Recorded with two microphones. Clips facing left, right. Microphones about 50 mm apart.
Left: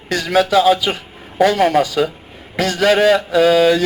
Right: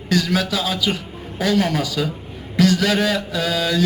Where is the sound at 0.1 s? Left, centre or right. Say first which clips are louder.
Left 5 dB; left.